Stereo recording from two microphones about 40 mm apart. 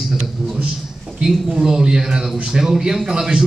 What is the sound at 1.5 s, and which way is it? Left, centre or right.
A man's voice, centre.